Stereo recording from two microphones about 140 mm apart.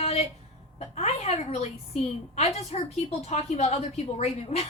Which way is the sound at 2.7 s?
45° left (ahead or behind).